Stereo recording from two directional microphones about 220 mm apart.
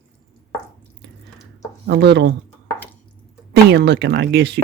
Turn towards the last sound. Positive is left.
turn(degrees=-50)  # may be behind; listen again after turning